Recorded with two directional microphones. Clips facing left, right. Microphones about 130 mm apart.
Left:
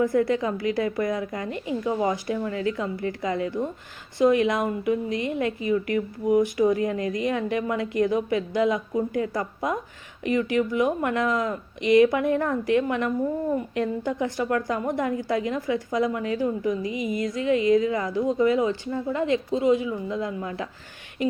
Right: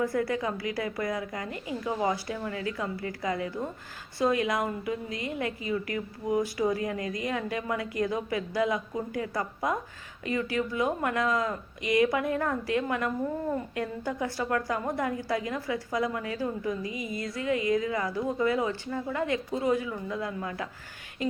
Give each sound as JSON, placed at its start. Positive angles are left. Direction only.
{"t": 0.0, "sound": "a woman's voice", "side_deg": 20}